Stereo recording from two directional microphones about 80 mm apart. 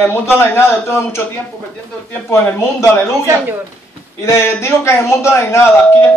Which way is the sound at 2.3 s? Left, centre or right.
Left.